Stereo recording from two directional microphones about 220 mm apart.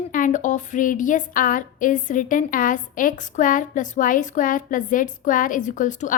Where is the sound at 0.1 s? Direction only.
35° left (ahead or behind).